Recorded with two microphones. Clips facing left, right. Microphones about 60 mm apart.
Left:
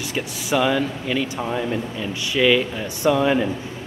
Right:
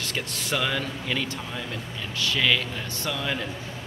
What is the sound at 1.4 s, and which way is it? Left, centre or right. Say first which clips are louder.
Speech: left 10 dB; left.